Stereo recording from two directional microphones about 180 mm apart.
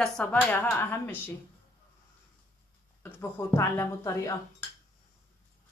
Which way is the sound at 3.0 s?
15° left (ahead or behind).